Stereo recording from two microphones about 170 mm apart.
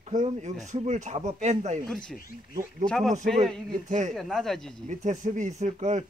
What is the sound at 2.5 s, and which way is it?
Speech, 50° right (ahead or behind).